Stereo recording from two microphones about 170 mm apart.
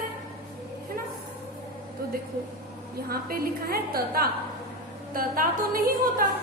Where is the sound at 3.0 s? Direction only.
60° right (ahead or behind).